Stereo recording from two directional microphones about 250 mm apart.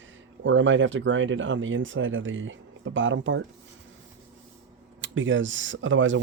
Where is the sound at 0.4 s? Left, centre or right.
Right.